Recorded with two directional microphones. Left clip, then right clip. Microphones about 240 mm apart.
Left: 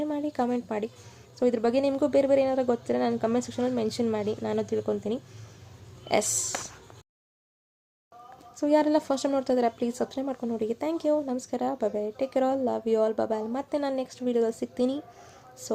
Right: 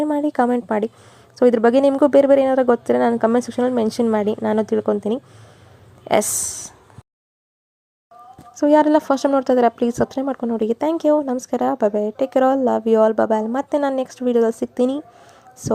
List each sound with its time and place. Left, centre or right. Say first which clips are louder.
0.0 s speech: right 10 dB; right
8.6 s speech: right 9 dB; right